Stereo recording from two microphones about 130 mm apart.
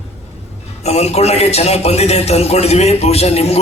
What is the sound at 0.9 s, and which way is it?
Speech, 55° left (ahead or behind).